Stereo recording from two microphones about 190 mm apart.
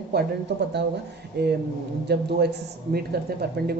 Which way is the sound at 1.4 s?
60° right (ahead or behind).